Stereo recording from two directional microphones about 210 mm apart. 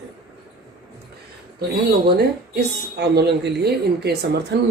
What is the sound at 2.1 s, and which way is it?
Speech, 50° right (ahead or behind).